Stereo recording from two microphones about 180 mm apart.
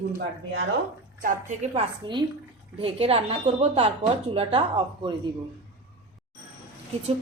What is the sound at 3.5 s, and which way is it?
Speech, 45° right (ahead or behind).